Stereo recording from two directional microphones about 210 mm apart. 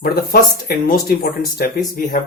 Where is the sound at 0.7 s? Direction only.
45° left (ahead or behind).